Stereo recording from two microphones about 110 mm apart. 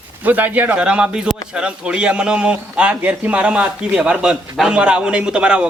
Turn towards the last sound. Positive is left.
turn(degrees=-10)  # may be behind; listen again after turning